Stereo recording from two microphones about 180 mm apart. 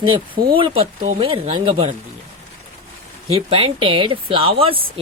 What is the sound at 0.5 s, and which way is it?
Speech, 30° right (ahead or behind).